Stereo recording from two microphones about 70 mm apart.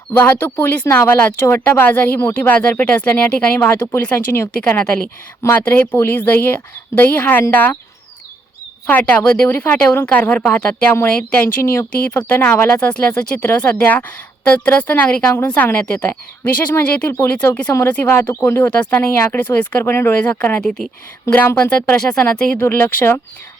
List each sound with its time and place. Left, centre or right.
0.1 s speech: left
3.7 s speech: left
8.9 s speech: left
11.6 s speech: left; by 17.7 s centre
18.0 s speech: left
18.7 s speech: left
19.9 s speech: left
20.1 s speech: left
22.5 s speech: left